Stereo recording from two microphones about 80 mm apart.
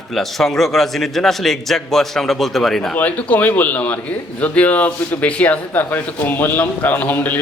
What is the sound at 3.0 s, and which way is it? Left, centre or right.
Speech, centre.